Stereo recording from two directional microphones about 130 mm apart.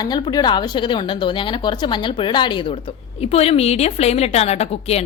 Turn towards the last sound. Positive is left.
turn(degrees=55)  # may be behind; listen again after turning